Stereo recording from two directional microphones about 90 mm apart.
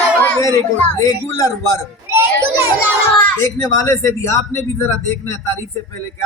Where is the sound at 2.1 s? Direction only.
25° right (ahead or behind).